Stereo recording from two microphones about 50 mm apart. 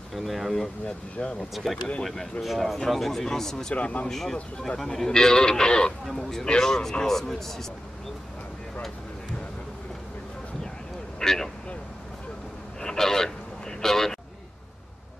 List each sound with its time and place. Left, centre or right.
0.1 s speech: centre
0.8 s speech: centre
1.5 s speech: centre
3.7 s speech: left
4.1 s speech: centre
11.1 s vehicle: centre
12.8 s a sound: centre